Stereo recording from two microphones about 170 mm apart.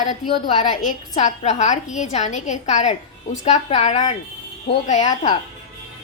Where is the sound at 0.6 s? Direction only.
45° left (ahead or behind).